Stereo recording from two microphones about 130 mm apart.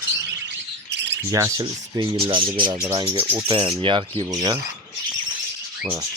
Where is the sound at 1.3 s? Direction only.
25° right (ahead or behind).